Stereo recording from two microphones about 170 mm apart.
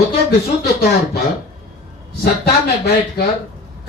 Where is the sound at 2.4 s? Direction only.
70° left (ahead or behind).